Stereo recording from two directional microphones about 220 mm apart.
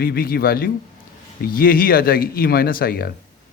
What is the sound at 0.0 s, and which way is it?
A man's voice, 45° left (ahead or behind).